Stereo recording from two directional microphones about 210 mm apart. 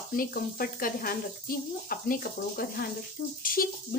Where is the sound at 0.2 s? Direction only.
45° left (ahead or behind).